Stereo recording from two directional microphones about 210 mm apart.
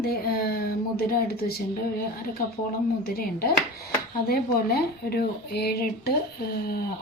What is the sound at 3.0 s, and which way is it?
Speech, 45° left (ahead or behind).